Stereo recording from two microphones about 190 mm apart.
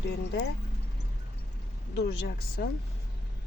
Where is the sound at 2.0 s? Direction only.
60° left (ahead or behind).